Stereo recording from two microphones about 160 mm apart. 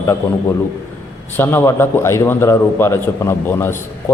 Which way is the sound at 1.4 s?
15° left (ahead or behind).